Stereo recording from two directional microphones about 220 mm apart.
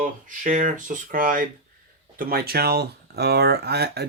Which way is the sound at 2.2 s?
45° right (ahead or behind).